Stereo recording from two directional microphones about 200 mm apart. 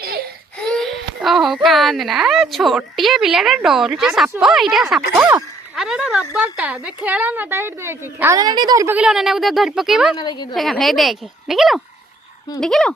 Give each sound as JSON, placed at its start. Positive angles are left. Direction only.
{"t": 0.7, "sound": "a child's voice", "side_deg": 0}
{"t": 9.0, "sound": "a child's voice", "side_deg": -5}
{"t": 10.2, "sound": "a woman's voice", "side_deg": 20}
{"t": 10.5, "sound": "a child's voice", "side_deg": 0}